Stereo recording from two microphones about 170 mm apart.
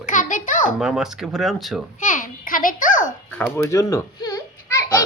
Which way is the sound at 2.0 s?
50° left (ahead or behind).